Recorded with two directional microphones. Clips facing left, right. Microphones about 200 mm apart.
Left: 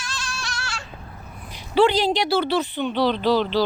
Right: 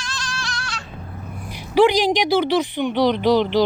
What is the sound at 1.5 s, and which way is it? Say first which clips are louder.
Speech: right 3 dB; 15° right (ahead or behind).